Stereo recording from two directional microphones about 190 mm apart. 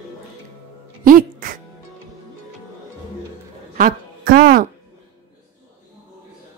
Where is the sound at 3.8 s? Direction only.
50° right (ahead or behind).